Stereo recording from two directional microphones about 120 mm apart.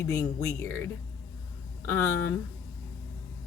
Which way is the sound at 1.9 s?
20° left (ahead or behind).